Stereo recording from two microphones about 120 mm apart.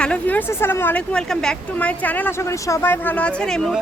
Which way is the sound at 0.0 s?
10° left (ahead or behind).